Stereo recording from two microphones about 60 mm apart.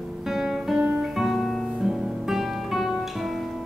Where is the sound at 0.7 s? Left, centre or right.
Right.